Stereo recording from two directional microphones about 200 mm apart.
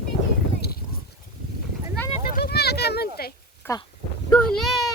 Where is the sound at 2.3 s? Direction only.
55° left (ahead or behind).